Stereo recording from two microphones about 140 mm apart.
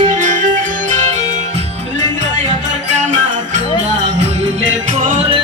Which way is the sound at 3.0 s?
60° right (ahead or behind).